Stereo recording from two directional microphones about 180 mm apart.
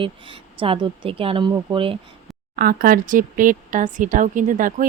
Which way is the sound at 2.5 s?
55° right (ahead or behind).